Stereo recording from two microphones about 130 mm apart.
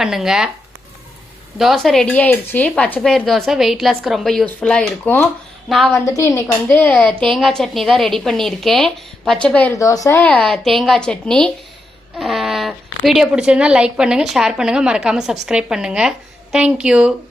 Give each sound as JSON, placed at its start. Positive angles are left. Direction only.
{"t": 0.0, "sound": "speech", "side_deg": -5}
{"t": 1.5, "sound": "speech", "side_deg": 0}
{"t": 5.9, "sound": "a woman's voice", "side_deg": 25}
{"t": 7.1, "sound": "a woman's voice", "side_deg": -40}
{"t": 7.3, "sound": "speech", "side_deg": 0}
{"t": 9.7, "sound": "a woman's voice", "side_deg": 25}
{"t": 10.2, "sound": "speech", "side_deg": 10}